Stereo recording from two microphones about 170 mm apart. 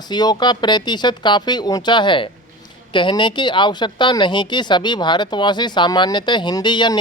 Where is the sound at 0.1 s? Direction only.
25° left (ahead or behind).